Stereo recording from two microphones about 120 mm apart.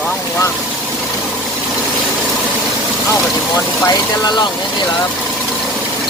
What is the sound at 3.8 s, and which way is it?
Speech, 35° left (ahead or behind).